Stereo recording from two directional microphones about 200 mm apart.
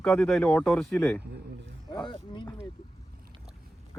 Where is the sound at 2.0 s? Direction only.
25° left (ahead or behind).